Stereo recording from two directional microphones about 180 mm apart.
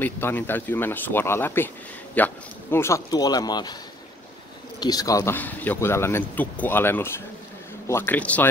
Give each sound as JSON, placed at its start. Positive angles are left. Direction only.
{"t": 0.0, "sound": "speech", "side_deg": 10}
{"t": 4.7, "sound": "speech", "side_deg": 20}